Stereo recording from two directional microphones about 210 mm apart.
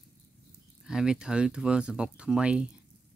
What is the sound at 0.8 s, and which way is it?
Speech, 5° right (ahead or behind).